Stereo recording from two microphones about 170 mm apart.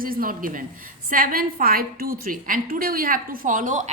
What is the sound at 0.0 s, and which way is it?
A woman's voice, 55° right (ahead or behind).